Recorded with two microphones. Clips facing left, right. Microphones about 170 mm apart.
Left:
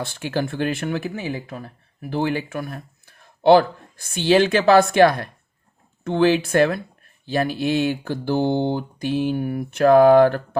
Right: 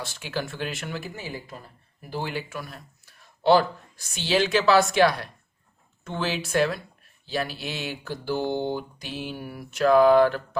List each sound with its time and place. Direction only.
0.0 s speech: 55° left (ahead or behind)